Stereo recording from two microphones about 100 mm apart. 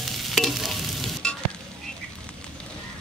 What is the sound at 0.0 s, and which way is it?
Stir, centre (ahead or behind).